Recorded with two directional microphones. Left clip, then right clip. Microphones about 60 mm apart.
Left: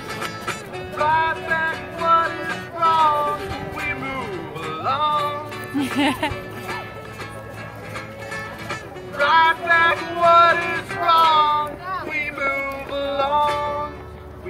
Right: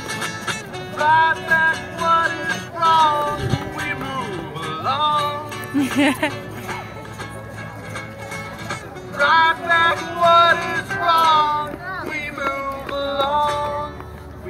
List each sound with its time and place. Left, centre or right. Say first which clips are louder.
0.2 s music: right 2 dB; left
5.9 s speech: right 2 dB; centre
8.6 s music: right 1 dB; left